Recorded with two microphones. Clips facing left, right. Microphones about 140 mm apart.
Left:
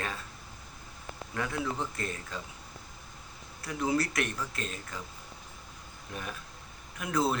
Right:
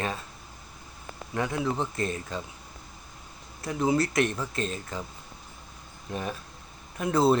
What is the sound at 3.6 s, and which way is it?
Speech, 25° right (ahead or behind).